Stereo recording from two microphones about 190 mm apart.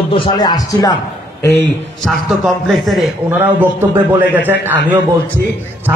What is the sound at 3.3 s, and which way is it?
A man's voice, 10° right (ahead or behind).